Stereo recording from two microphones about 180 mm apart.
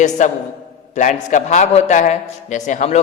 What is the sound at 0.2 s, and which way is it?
A man's voice, 45° left (ahead or behind).